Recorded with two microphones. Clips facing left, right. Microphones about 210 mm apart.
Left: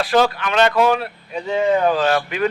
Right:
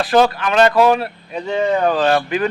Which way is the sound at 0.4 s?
40° right (ahead or behind).